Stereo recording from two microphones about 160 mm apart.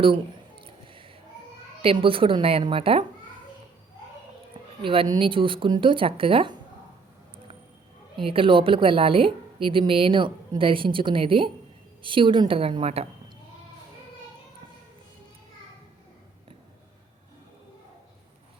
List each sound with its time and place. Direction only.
0.6 s a sound: 30° right (ahead or behind)
1.8 s a woman's voice: 35° right (ahead or behind)
4.8 s a woman's voice: 35° right (ahead or behind)
8.1 s a woman's voice: 35° right (ahead or behind)